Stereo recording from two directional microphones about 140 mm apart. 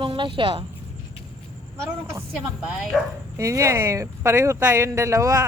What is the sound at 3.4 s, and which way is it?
Speech, 20° right (ahead or behind).